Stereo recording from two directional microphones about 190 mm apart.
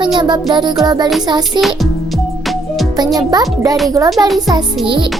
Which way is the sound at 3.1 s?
20° right (ahead or behind).